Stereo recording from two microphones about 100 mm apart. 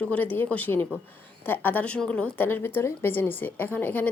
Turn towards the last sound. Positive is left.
turn(degrees=15)  # may be behind; listen again after turning